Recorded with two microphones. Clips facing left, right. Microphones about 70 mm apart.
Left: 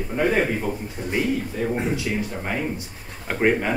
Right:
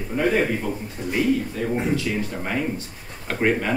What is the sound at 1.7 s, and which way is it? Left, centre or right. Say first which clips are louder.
A man's voice: right 3 dB; centre.